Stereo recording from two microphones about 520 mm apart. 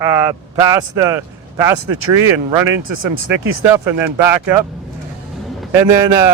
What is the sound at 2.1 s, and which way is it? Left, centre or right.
Speech, right.